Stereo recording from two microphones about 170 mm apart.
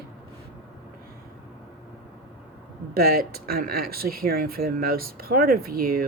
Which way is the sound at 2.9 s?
60° right (ahead or behind).